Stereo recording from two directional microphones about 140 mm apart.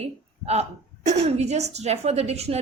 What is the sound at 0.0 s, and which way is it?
A woman's voice, 50° right (ahead or behind).